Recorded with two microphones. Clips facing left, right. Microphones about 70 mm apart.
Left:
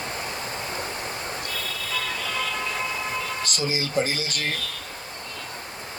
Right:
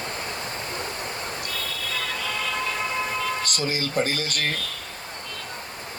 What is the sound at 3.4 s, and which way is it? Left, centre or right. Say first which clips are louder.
Speech: even; right.